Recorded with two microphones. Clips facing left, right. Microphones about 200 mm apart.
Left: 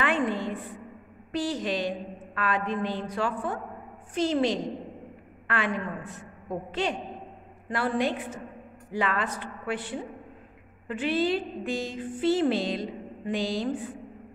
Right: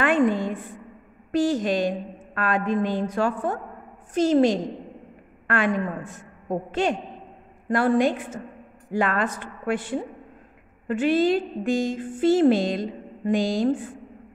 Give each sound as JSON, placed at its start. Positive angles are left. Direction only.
{"t": 0.0, "sound": "a woman's voice", "side_deg": -45}